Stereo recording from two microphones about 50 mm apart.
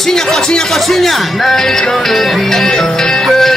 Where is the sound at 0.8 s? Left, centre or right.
Centre.